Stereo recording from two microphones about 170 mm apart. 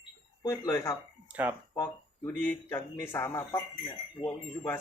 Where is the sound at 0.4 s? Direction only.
15° left (ahead or behind).